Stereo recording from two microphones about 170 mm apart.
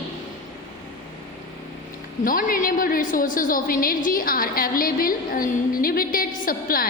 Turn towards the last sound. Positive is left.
turn(degrees=55)  # may be behind; listen again after turning